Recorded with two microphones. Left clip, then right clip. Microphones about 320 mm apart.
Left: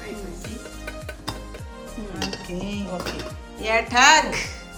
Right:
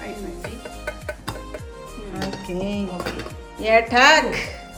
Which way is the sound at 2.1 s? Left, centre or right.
Centre.